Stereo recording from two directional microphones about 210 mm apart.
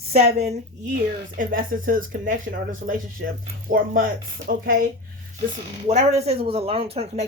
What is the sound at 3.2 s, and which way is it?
Speech, 50° right (ahead or behind).